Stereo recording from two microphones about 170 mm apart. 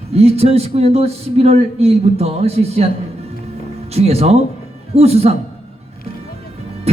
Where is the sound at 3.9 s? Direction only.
40° right (ahead or behind).